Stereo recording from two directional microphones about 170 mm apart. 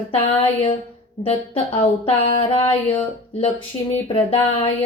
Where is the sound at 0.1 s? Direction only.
35° left (ahead or behind).